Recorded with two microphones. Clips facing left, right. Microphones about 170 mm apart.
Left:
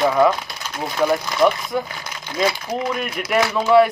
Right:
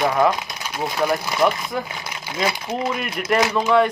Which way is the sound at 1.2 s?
Centre (ahead or behind).